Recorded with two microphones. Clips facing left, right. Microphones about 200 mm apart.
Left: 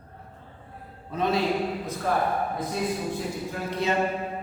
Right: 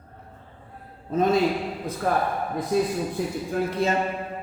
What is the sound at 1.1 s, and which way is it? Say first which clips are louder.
Speech: right 5 dB; 45° right (ahead or behind).